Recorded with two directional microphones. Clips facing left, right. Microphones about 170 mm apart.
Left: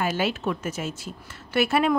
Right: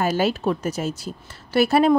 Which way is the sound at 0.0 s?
40° right (ahead or behind).